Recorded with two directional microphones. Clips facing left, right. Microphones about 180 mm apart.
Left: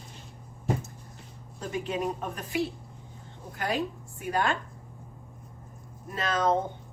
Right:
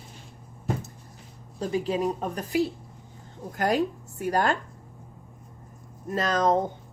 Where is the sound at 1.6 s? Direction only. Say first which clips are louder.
Right 5 dB; 35° right (ahead or behind).